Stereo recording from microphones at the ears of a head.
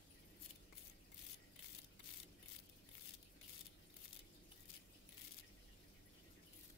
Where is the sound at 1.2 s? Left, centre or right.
Left.